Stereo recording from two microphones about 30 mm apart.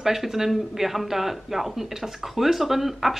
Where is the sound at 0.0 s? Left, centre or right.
Centre.